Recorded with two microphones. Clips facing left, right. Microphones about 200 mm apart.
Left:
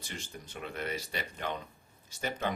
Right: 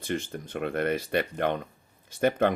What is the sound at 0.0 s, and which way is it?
Speech, 55° right (ahead or behind).